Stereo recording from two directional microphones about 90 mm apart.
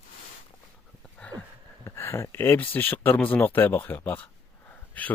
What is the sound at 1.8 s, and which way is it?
Speech, 30° left (ahead or behind).